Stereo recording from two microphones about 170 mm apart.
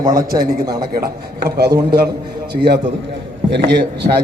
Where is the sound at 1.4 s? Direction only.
65° right (ahead or behind).